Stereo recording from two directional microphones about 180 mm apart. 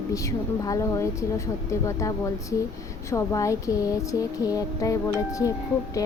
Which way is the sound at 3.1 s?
15° left (ahead or behind).